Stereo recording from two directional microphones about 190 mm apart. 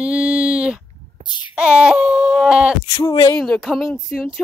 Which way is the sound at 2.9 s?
20° left (ahead or behind).